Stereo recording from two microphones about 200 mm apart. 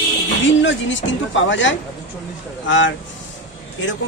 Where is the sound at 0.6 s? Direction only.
70° left (ahead or behind).